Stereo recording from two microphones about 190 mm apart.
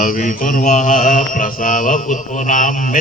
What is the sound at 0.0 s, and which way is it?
Mantra, 45° left (ahead or behind).